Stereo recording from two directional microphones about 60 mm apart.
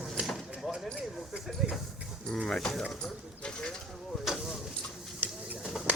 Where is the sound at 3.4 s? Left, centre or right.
Centre.